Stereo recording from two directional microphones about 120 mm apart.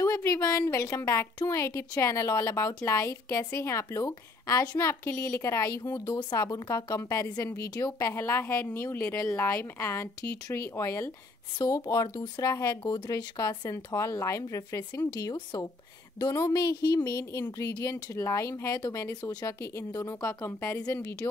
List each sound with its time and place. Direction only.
0.0 s a woman's voice: 25° left (ahead or behind)